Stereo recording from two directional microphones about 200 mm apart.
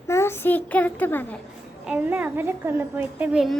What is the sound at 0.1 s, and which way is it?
A child's voice, 10° left (ahead or behind).